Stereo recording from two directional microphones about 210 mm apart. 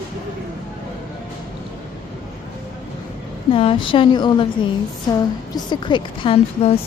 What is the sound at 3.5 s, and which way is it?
Speech, 25° left (ahead or behind).